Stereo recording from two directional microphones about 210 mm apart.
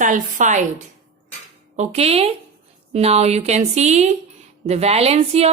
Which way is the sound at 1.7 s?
30° right (ahead or behind).